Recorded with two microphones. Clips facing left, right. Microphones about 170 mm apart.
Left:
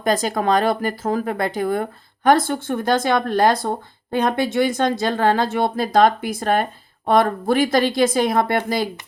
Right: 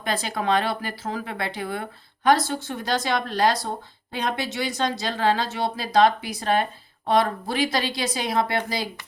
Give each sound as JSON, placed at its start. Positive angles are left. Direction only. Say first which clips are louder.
{"t": 0.0, "sound": "speech", "louder": "left 7 dB", "side_deg": 45}